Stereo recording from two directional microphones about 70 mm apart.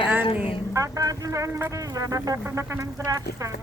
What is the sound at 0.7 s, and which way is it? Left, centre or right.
Speech, right.